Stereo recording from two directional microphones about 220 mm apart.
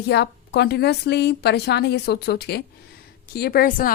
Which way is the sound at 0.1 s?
50° left (ahead or behind).